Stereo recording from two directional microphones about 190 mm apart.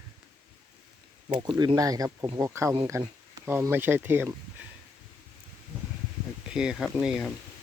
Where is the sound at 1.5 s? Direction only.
20° right (ahead or behind).